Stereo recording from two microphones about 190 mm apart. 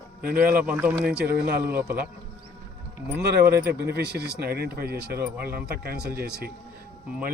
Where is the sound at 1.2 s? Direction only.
55° right (ahead or behind).